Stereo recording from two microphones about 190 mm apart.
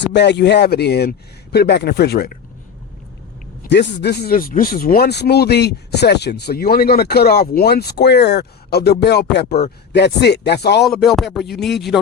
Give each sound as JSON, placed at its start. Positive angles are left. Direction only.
{"t": 0.1, "sound": "speech", "side_deg": 65}
{"t": 3.7, "sound": "speech", "side_deg": 65}
{"t": 10.8, "sound": "speech", "side_deg": 0}